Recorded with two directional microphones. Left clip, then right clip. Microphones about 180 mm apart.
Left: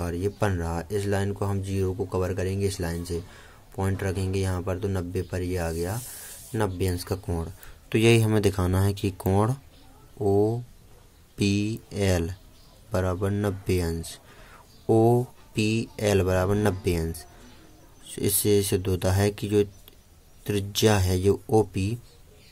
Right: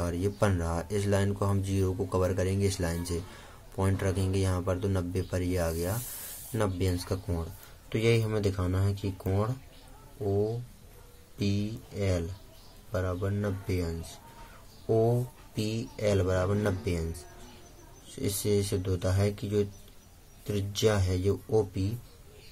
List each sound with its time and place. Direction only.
0.0 s speech: 20° left (ahead or behind)
7.9 s speech: 45° left (ahead or behind)
11.3 s speech: 50° left (ahead or behind)